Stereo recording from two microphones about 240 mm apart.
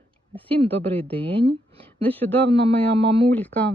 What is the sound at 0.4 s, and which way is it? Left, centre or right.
Speech, right.